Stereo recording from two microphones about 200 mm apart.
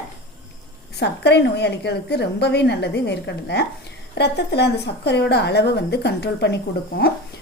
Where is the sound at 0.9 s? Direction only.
55° left (ahead or behind).